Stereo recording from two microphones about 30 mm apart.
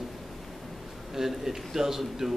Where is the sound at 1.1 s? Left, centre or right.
Centre.